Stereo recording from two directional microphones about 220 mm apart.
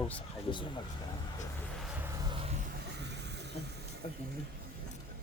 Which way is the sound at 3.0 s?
50° right (ahead or behind).